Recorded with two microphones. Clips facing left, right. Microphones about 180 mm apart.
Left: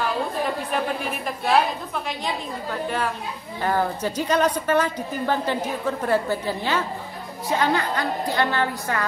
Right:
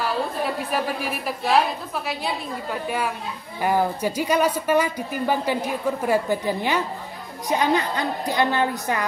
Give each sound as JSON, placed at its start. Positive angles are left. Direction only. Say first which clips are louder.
{"t": 0.7, "sound": "speech", "louder": "even", "side_deg": -5}
{"t": 3.6, "sound": "speech", "louder": "right 2 dB", "side_deg": -10}